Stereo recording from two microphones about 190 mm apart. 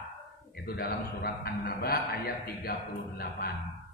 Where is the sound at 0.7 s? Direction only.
50° left (ahead or behind).